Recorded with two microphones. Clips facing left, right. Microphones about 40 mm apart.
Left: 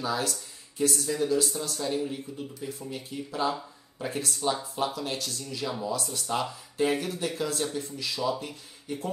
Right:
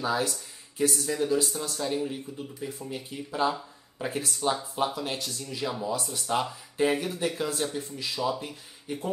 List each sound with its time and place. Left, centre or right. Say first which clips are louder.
0.0 s speech: right 2 dB; right
4.3 s speech: right 1 dB; centre
5.7 s speech: even; centre
5.9 s speech: right 1 dB; right